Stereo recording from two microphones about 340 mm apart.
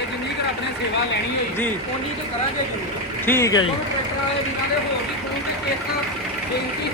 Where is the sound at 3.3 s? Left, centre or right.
Centre.